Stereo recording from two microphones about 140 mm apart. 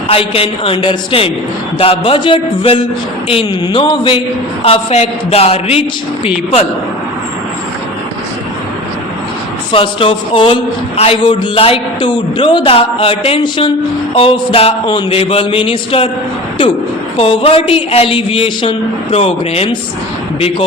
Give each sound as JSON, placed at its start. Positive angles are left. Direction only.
{"t": 0.1, "sound": "a man's voice", "side_deg": 40}
{"t": 9.7, "sound": "a man's voice", "side_deg": 40}
{"t": 17.2, "sound": "a man's voice", "side_deg": 45}